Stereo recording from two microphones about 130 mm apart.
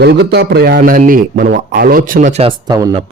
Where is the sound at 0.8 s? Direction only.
90° right.